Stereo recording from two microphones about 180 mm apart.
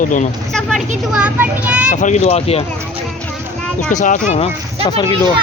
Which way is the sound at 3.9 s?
45° left (ahead or behind).